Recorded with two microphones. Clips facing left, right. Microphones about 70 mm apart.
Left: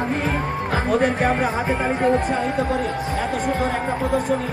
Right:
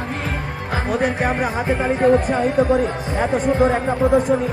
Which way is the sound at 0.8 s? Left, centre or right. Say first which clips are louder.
Left 1 dB; centre.